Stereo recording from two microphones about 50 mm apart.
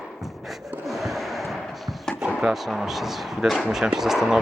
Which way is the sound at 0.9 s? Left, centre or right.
Centre.